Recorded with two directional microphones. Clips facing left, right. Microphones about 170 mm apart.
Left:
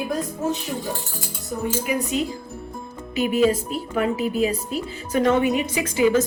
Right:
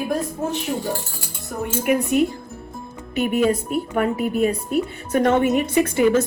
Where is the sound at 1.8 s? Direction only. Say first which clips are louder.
Right 5 dB; 60° right (ahead or behind).